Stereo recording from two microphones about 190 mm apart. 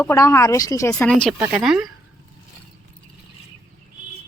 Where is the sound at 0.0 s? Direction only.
15° left (ahead or behind).